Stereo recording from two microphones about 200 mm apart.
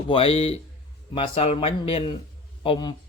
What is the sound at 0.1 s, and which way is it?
Speech, 30° left (ahead or behind).